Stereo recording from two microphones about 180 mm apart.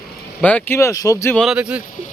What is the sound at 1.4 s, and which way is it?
Speech, 5° right (ahead or behind).